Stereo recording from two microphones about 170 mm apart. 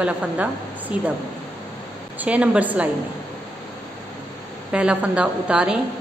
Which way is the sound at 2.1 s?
5° right (ahead or behind).